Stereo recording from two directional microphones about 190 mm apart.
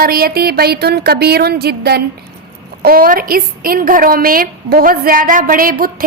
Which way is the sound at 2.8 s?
50° right (ahead or behind).